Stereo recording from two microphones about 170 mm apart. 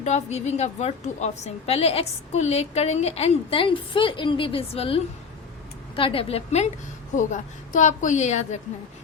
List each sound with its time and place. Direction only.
0.0 s a woman's voice: 40° left (ahead or behind)
6.0 s a woman's voice: 30° left (ahead or behind)
7.2 s a woman's voice: 50° left (ahead or behind)